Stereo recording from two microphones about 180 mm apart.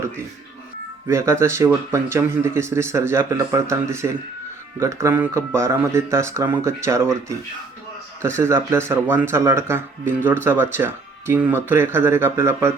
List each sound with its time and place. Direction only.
1.0 s speech: 15° right (ahead or behind)
8.4 s speech: 15° right (ahead or behind)